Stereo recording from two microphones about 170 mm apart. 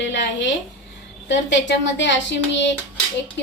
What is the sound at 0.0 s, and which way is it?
A woman's voice, 90° left.